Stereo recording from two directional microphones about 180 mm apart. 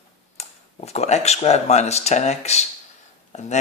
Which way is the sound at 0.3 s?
35° left (ahead or behind).